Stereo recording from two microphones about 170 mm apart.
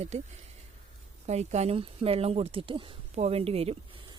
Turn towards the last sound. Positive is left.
turn(degrees=-35)  # may be behind; listen again after turning